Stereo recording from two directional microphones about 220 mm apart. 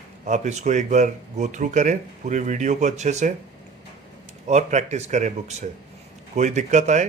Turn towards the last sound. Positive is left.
turn(degrees=-35)  # may be behind; listen again after turning